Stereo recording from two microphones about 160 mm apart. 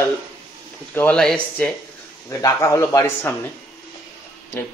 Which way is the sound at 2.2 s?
20° left (ahead or behind).